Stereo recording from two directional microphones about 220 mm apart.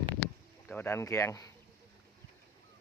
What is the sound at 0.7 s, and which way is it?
Speech, 10° left (ahead or behind).